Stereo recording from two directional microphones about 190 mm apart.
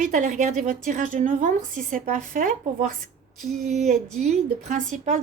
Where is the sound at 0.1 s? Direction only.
40° right (ahead or behind).